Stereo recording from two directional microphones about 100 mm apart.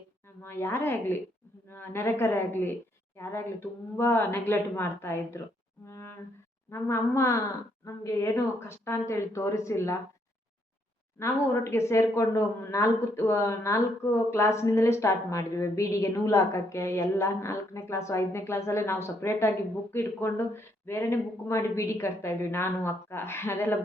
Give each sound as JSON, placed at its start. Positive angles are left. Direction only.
{"t": 0.4, "sound": "speech", "side_deg": 25}
{"t": 11.2, "sound": "speech", "side_deg": 25}